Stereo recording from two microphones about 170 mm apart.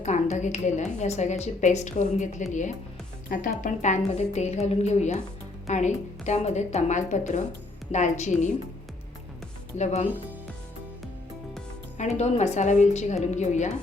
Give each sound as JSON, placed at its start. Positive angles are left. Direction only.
{"t": 0.0, "sound": "a woman's voice", "side_deg": 45}
{"t": 9.7, "sound": "speech", "side_deg": 40}
{"t": 11.9, "sound": "a woman's voice", "side_deg": 40}